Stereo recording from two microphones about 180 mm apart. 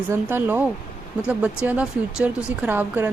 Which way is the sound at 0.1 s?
10° right (ahead or behind).